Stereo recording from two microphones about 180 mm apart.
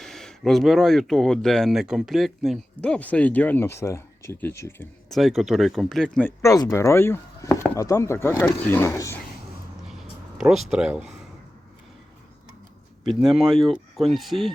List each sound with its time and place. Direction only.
0.0 s speech: centre (ahead or behind)
5.0 s speech: centre (ahead or behind)
9.9 s a sound: centre (ahead or behind)
13.1 s speech: 5° right (ahead or behind)